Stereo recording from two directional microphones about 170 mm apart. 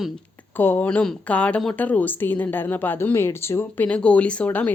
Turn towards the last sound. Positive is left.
turn(degrees=10)  # may be behind; listen again after turning